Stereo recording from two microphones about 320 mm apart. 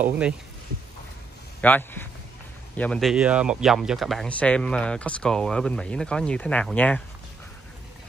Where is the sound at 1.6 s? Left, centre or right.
Centre.